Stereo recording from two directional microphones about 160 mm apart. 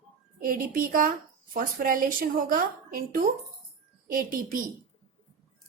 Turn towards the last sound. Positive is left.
turn(degrees=-60)  # may be behind; listen again after turning